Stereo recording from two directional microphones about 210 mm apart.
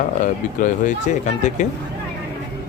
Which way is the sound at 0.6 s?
35° left (ahead or behind).